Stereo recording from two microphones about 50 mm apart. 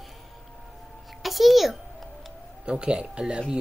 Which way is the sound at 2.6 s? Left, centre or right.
Centre.